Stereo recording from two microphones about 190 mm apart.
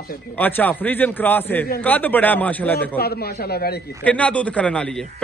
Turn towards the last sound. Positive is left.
turn(degrees=5)  # may be behind; listen again after turning